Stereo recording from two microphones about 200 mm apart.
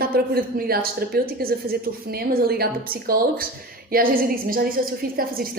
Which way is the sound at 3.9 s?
45° right (ahead or behind).